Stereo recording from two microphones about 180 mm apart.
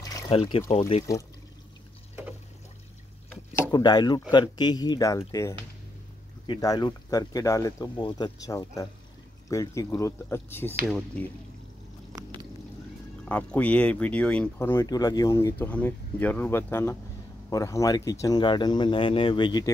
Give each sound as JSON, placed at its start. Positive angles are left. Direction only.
{"t": 0.3, "sound": "speech", "side_deg": 30}
{"t": 3.7, "sound": "speech", "side_deg": 25}
{"t": 10.9, "sound": "speech", "side_deg": 0}
{"t": 13.2, "sound": "speech", "side_deg": 5}